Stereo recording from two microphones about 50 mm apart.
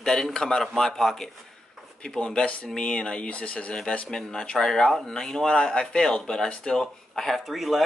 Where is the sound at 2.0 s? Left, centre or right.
Centre.